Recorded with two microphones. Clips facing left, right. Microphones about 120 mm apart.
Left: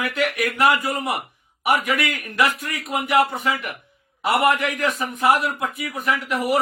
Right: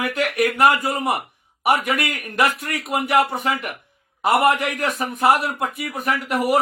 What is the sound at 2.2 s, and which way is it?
A man's voice, 50° right (ahead or behind).